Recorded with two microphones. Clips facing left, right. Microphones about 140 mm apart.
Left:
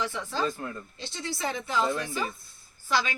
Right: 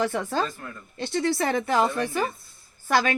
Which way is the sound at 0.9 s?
55° right (ahead or behind).